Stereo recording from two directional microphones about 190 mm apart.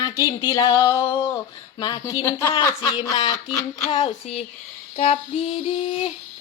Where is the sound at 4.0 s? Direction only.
30° left (ahead or behind).